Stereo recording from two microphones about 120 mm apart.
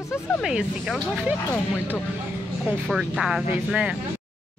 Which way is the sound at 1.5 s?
15° left (ahead or behind).